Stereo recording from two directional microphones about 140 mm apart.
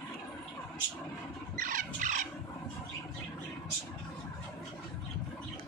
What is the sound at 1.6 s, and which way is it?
Squeal, 70° right (ahead or behind).